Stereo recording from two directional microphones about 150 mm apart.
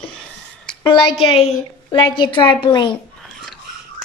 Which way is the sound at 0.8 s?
40° left (ahead or behind).